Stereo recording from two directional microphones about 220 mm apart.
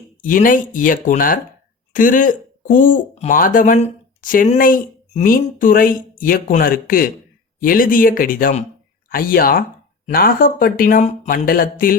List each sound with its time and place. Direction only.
0.2 s speech: 35° left (ahead or behind)